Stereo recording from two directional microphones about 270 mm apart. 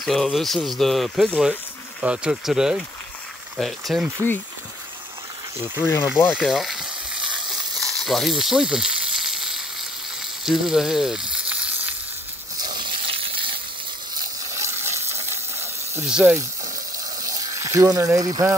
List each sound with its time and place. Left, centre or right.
0.0 s speech: centre
6.3 s frying: centre
10.4 s speech: centre
11.3 s frying: centre
12.6 s a sound: centre
17.2 s water: centre